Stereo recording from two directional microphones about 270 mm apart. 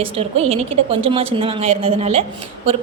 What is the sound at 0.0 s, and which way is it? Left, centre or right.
A woman's voice, right.